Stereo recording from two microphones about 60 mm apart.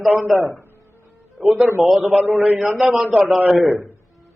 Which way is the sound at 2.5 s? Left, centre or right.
Right.